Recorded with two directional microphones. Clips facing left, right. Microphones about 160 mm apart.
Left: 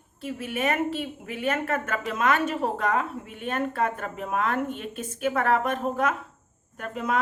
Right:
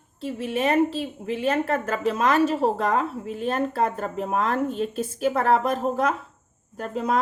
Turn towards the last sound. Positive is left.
turn(degrees=-35)  # may be behind; listen again after turning